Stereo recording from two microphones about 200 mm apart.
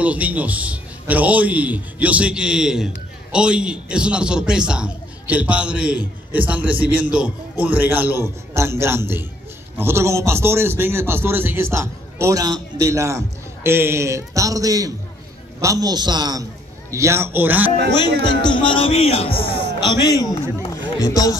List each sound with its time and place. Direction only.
0.0 s a man's voice: 5° right (ahead or behind)
18.2 s speech: 20° left (ahead or behind)